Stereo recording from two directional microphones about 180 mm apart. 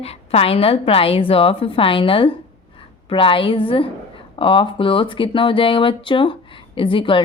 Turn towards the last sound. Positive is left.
turn(degrees=30)  # may be behind; listen again after turning